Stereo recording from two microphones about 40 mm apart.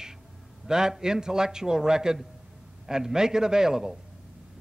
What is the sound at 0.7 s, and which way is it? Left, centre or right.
A man's voice, centre.